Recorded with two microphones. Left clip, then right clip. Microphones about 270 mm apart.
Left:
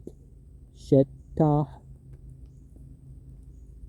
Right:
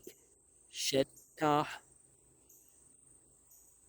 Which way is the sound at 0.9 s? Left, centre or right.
Right.